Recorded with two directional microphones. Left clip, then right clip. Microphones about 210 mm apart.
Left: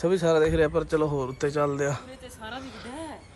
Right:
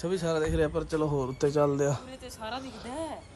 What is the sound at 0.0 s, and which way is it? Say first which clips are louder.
A man's voice: left 7 dB; 10° right (ahead or behind).